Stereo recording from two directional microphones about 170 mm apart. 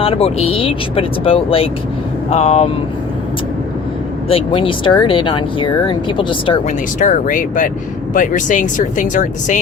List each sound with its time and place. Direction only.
0.0 s speech: 35° left (ahead or behind)
4.3 s speech: 35° left (ahead or behind)
6.7 s speech: 50° left (ahead or behind)